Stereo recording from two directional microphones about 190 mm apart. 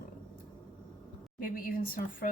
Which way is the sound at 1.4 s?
45° left (ahead or behind).